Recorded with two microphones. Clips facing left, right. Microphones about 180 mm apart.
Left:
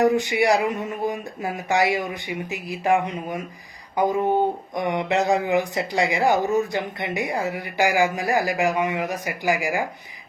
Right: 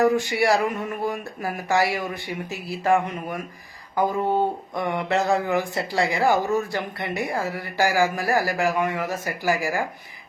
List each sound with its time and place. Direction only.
0.0 s speech: 20° left (ahead or behind)